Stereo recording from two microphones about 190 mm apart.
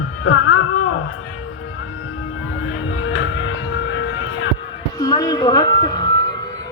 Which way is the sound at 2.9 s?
90° left.